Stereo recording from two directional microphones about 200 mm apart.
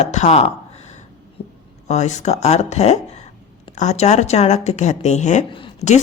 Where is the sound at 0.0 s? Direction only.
35° left (ahead or behind).